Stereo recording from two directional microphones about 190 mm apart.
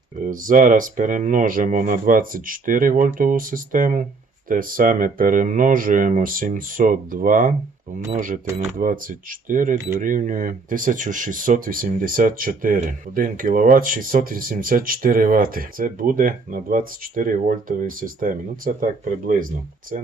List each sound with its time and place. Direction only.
0.2 s speech: 45° right (ahead or behind)